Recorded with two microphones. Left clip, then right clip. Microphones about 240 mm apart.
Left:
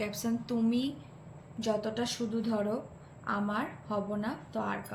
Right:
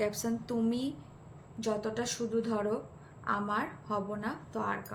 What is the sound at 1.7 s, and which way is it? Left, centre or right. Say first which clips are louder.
A woman's voice: left 1 dB; right.